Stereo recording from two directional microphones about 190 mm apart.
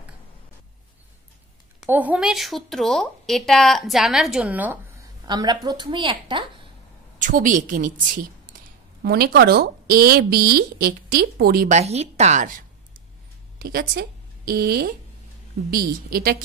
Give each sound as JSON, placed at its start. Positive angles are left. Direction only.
{"t": 1.8, "sound": "speech", "side_deg": -10}
{"t": 5.2, "sound": "a woman's voice", "side_deg": -20}
{"t": 7.2, "sound": "a woman's voice", "side_deg": -45}
{"t": 9.0, "sound": "a woman's voice", "side_deg": -55}
{"t": 11.7, "sound": "a woman's voice", "side_deg": -35}
{"t": 13.6, "sound": "a woman's voice", "side_deg": -50}